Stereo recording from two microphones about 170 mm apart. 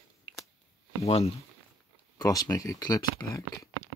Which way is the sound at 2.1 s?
20° left (ahead or behind).